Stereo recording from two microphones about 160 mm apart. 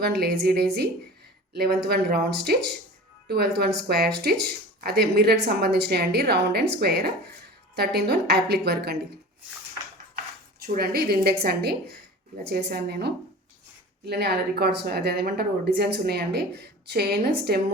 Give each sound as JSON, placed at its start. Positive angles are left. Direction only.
{"t": 0.0, "sound": "speech", "side_deg": -85}
{"t": 1.5, "sound": "speech", "side_deg": -75}
{"t": 10.2, "sound": "speech", "side_deg": -70}
{"t": 12.5, "sound": "speech", "side_deg": -90}